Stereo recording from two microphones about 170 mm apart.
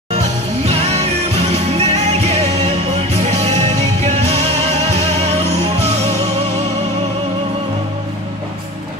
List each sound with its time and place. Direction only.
1.5 s music: 40° right (ahead or behind)